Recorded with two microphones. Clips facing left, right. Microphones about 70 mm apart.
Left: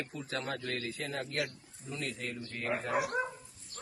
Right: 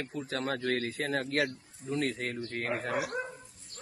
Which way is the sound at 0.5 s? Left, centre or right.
Right.